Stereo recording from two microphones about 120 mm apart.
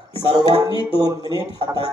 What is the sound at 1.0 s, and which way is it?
Speech, 30° right (ahead or behind).